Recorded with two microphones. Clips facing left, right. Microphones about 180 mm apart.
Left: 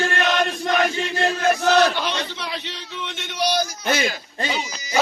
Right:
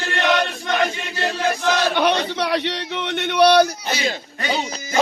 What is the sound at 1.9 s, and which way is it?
A man's voice, 60° right (ahead or behind).